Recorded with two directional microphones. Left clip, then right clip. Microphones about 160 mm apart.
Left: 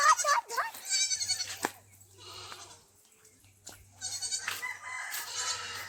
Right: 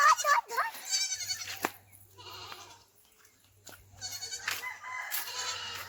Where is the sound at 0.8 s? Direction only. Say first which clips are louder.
Left 2 dB; 25° right (ahead or behind).